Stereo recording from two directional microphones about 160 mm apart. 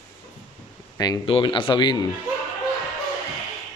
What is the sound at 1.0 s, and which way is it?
Speech, 25° left (ahead or behind).